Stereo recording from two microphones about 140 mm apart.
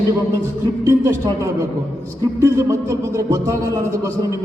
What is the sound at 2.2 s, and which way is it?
Speech, 20° right (ahead or behind).